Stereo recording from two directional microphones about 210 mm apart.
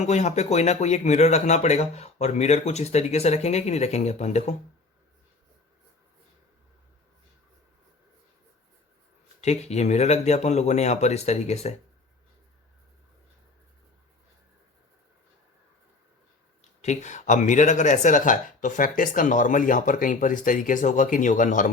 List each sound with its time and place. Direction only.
0.0 s speech: 35° left (ahead or behind)
9.4 s speech: 30° left (ahead or behind)
16.8 s speech: 35° left (ahead or behind)